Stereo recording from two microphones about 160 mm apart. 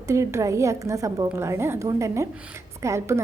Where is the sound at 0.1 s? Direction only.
15° right (ahead or behind).